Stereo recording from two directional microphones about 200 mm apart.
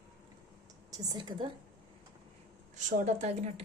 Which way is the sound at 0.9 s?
20° right (ahead or behind).